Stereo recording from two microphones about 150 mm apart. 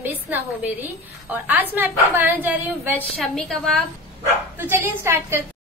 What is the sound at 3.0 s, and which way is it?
Speech, 5° left (ahead or behind).